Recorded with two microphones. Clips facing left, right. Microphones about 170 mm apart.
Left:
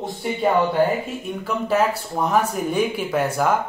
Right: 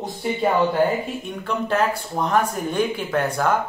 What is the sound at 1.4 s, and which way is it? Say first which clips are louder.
Speech: left 1 dB; 5° left (ahead or behind).